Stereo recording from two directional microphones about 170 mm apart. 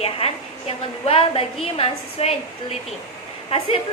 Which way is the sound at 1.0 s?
35° left (ahead or behind).